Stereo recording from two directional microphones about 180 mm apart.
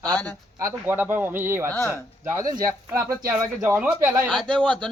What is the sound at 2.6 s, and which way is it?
Speech, 55° right (ahead or behind).